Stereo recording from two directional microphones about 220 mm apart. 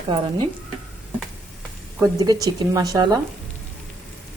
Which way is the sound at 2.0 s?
15° right (ahead or behind).